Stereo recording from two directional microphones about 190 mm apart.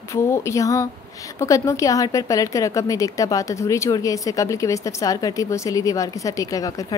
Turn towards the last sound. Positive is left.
turn(degrees=20)  # may be behind; listen again after turning